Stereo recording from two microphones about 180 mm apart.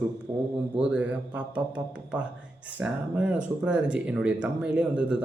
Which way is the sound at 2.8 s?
5° right (ahead or behind).